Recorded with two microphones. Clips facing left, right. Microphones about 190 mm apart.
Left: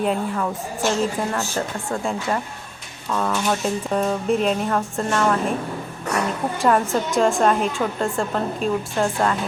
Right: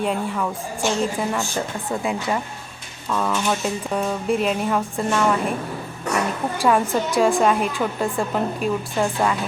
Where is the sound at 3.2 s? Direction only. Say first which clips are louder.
Even; 5° left (ahead or behind).